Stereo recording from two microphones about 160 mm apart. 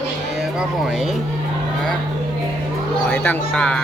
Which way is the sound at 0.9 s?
Centre (ahead or behind).